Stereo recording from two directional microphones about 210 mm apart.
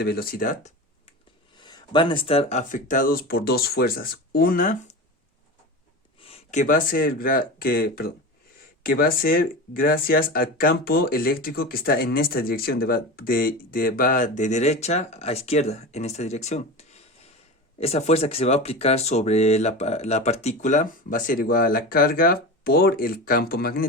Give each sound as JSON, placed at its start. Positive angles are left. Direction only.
{"t": 0.0, "sound": "speech", "side_deg": 45}
{"t": 1.5, "sound": "speech", "side_deg": 20}
{"t": 6.1, "sound": "speech", "side_deg": 25}